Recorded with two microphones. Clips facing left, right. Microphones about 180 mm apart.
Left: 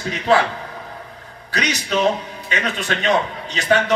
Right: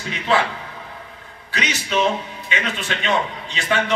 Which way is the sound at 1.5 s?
40° left (ahead or behind).